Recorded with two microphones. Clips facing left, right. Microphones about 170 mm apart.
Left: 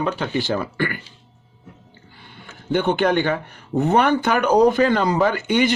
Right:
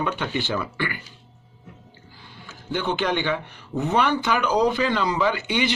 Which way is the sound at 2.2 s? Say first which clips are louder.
Left 3 dB; 60° left (ahead or behind).